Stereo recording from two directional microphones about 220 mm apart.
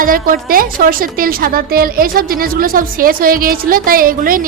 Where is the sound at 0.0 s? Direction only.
40° right (ahead or behind).